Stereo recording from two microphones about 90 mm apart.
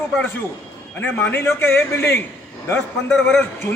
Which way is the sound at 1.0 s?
20° left (ahead or behind).